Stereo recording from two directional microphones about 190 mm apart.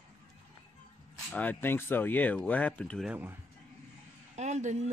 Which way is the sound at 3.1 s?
10° right (ahead or behind).